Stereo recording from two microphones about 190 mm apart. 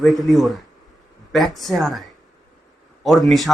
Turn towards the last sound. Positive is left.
turn(degrees=0)  # may be behind; listen again after turning